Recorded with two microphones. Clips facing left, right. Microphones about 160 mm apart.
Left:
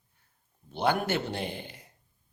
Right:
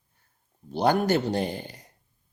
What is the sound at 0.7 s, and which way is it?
Speech, 40° right (ahead or behind).